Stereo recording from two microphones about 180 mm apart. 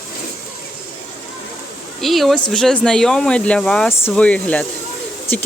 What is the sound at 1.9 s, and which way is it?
Speech, centre (ahead or behind).